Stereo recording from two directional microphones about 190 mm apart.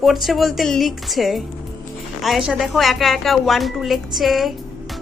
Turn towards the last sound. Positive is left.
turn(degrees=0)  # may be behind; listen again after turning